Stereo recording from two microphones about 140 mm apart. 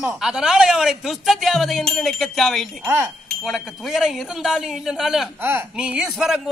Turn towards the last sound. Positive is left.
turn(degrees=-5)  # may be behind; listen again after turning